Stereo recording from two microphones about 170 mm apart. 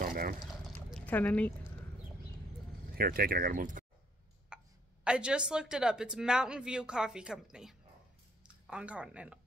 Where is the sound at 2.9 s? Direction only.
60° right (ahead or behind).